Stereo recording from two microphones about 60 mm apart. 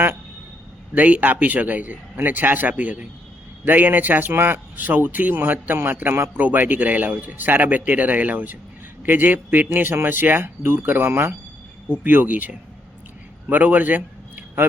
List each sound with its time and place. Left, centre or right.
0.9 s a man's voice: right
12.0 s a man's voice: right